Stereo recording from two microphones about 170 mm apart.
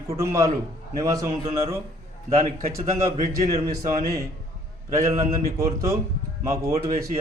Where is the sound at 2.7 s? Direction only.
15° right (ahead or behind).